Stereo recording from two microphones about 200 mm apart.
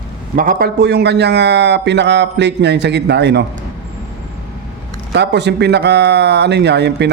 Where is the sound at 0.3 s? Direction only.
45° right (ahead or behind).